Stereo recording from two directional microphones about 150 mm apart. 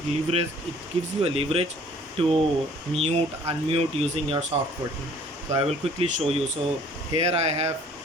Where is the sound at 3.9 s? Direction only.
45° right (ahead or behind).